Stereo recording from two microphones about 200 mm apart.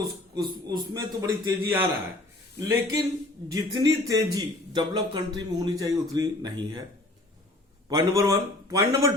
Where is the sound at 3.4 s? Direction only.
20° right (ahead or behind).